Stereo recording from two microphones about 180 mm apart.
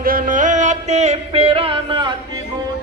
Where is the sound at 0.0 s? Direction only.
50° right (ahead or behind); by 2.1 s 25° right (ahead or behind).